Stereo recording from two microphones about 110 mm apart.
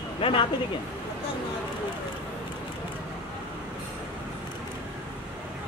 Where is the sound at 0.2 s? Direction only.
50° left (ahead or behind).